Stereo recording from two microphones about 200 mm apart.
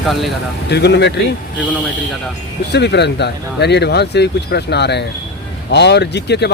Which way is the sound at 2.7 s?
60° left (ahead or behind).